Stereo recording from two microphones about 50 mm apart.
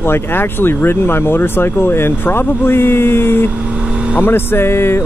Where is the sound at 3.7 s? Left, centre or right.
Right.